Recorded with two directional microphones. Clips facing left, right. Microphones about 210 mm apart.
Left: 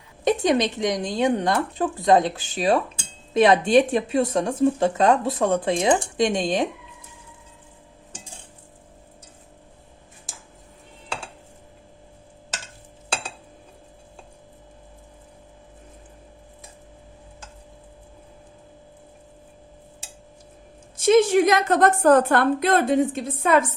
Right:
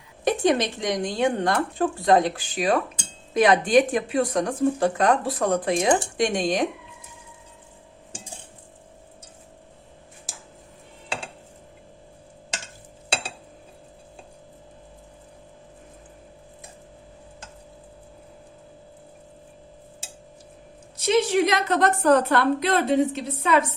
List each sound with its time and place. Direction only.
0.3 s speech: 20° left (ahead or behind)
20.9 s a woman's voice: 50° left (ahead or behind)